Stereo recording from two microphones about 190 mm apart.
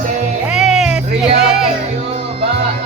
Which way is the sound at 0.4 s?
5° right (ahead or behind).